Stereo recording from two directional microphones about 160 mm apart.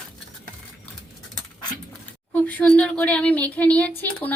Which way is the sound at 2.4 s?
10° left (ahead or behind).